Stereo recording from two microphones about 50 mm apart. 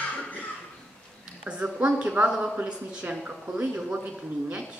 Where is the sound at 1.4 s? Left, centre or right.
Right.